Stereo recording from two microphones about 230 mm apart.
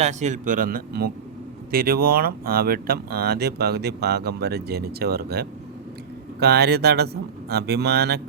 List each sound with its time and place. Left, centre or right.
0.0 s speech: right